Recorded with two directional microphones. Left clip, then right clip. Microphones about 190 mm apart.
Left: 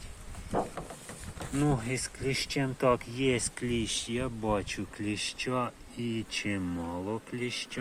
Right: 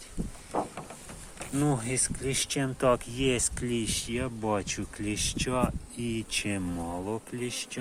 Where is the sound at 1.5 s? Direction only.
5° right (ahead or behind).